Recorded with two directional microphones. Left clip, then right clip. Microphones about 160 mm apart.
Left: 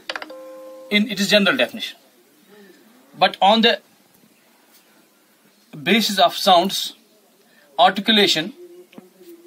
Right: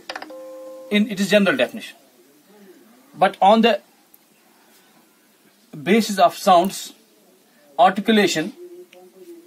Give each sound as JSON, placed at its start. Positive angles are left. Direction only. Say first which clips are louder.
{"t": 0.0, "sound": "music", "louder": "left 3 dB", "side_deg": -15}
{"t": 0.8, "sound": "speech", "louder": "left 2 dB", "side_deg": -15}
{"t": 3.2, "sound": "speech", "louder": "right 1 dB", "side_deg": -25}
{"t": 5.7, "sound": "speech", "louder": "left 1 dB", "side_deg": -15}
{"t": 7.7, "sound": "speech", "louder": "even", "side_deg": -15}